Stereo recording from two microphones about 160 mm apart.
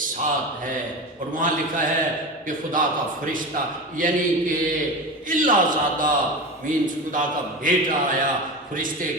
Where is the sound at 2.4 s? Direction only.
55° right (ahead or behind).